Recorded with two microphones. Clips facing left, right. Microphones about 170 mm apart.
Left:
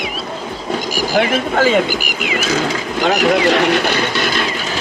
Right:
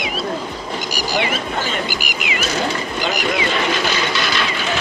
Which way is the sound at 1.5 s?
90° left.